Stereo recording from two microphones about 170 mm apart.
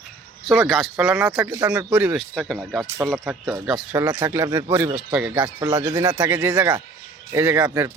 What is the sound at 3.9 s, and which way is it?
Speech, 20° right (ahead or behind).